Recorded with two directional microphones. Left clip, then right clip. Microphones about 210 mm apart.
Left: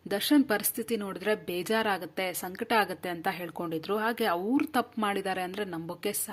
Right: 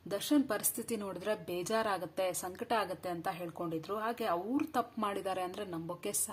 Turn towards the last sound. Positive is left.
turn(degrees=20)  # may be behind; listen again after turning